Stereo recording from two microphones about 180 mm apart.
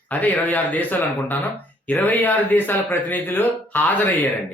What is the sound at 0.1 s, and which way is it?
Speech, 10° left (ahead or behind).